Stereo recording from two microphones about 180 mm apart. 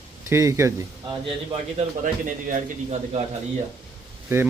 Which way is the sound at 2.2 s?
40° right (ahead or behind).